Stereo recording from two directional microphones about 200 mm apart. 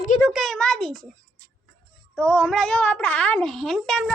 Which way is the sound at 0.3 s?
Centre (ahead or behind).